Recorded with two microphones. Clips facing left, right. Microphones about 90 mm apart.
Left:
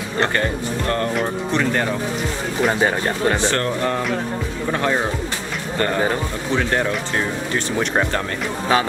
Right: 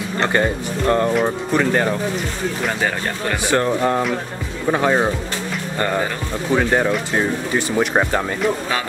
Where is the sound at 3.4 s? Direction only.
10° right (ahead or behind).